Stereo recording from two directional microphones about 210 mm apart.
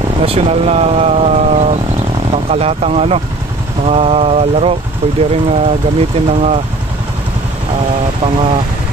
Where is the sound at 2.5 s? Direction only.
30° right (ahead or behind).